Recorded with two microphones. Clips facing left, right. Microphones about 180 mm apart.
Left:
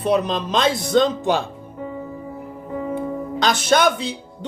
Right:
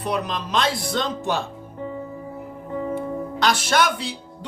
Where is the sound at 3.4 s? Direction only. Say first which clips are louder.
Left 4 dB; 20° left (ahead or behind).